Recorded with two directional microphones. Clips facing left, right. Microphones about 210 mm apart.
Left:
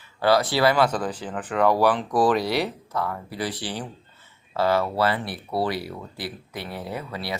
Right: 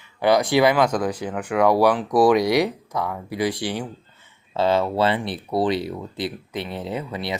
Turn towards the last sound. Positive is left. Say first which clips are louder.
# right 4 dB
turn(degrees=-20)  # may be behind; listen again after turning